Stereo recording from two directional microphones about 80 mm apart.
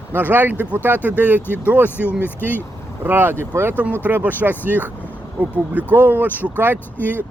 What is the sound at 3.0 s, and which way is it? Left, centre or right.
Speech, right.